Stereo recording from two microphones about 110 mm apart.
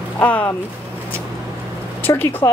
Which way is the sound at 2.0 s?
20° left (ahead or behind).